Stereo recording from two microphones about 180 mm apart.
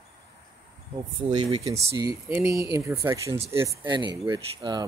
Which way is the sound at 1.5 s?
20° right (ahead or behind).